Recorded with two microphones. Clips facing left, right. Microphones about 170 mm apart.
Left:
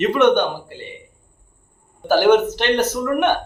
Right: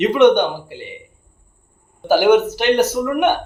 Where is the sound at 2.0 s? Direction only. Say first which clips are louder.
Right 1 dB; 10° right (ahead or behind).